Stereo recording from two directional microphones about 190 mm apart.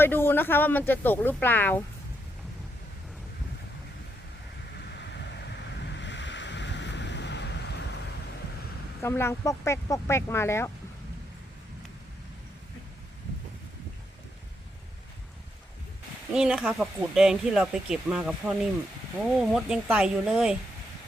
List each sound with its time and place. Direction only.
0.0 s speech: 10° left (ahead or behind)
4.8 s waves: 65° left (ahead or behind)
9.0 s speech: 15° left (ahead or behind)
16.3 s speech: 5° right (ahead or behind)